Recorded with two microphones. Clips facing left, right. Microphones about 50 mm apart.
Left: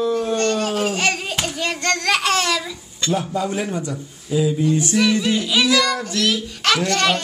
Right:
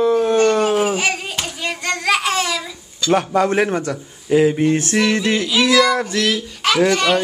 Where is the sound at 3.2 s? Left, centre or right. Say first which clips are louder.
Right 7 dB; right.